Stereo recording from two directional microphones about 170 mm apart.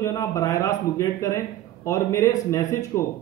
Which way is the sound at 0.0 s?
20° left (ahead or behind).